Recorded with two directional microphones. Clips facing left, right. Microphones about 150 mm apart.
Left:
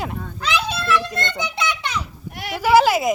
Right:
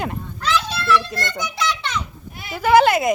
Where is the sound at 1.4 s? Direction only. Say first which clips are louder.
Right 3 dB; 25° left (ahead or behind).